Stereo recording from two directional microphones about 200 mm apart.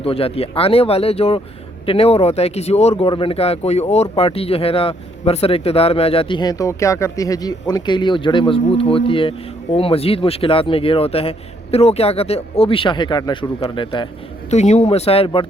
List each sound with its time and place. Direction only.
0.0 s speech: 30° left (ahead or behind)
14.5 s speech: 35° left (ahead or behind)